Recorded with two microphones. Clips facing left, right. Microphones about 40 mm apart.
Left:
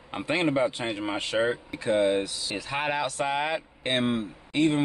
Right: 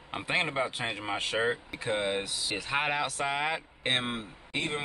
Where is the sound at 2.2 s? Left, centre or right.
Right.